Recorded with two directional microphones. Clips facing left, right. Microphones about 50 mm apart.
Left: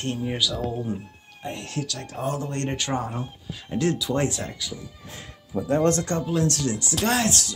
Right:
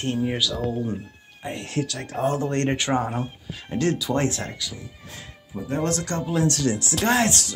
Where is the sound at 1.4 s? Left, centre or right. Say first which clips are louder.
Right 1 dB; centre.